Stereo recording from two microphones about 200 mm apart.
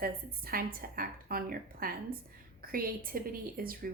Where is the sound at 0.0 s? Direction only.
45° right (ahead or behind).